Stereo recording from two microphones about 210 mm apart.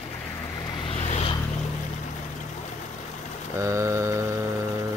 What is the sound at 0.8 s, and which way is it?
Vehicle, 30° left (ahead or behind).